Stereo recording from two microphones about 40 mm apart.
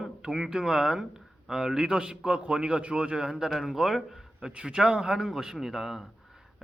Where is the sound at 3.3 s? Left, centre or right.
Centre.